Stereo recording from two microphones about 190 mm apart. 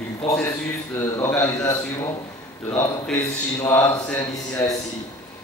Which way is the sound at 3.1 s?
15° left (ahead or behind).